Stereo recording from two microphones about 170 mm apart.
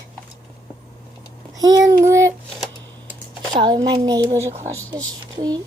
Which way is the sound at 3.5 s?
25° right (ahead or behind).